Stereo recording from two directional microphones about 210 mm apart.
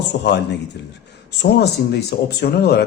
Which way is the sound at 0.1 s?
55° left (ahead or behind).